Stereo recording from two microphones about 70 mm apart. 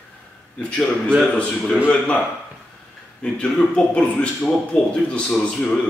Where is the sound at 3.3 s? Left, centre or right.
Centre.